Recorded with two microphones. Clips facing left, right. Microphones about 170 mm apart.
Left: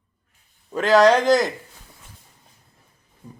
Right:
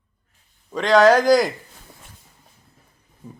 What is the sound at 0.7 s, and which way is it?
Speech, centre (ahead or behind).